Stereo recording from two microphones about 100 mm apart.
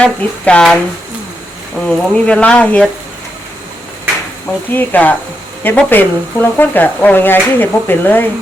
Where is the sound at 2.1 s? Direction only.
10° left (ahead or behind).